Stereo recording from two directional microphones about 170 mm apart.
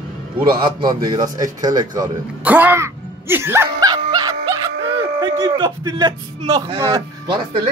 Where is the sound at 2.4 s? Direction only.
10° right (ahead or behind).